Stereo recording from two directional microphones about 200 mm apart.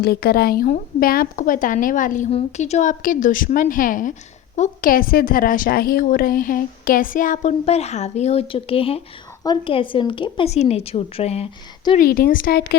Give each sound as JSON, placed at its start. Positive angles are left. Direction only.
{"t": 0.0, "sound": "a woman's voice", "side_deg": 50}
{"t": 11.9, "sound": "a woman's voice", "side_deg": 50}